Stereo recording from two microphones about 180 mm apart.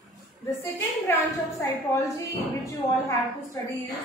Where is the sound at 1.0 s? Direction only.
15° left (ahead or behind).